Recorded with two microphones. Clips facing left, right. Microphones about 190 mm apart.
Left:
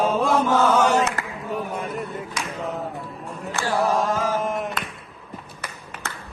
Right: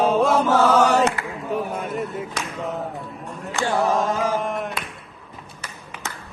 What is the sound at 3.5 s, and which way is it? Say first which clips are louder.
Mantra: right 2 dB; 20° right (ahead or behind).